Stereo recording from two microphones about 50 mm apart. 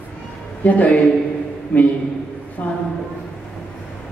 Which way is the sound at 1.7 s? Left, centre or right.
Left.